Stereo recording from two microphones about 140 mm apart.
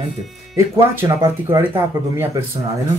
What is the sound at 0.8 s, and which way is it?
Speech, 20° right (ahead or behind).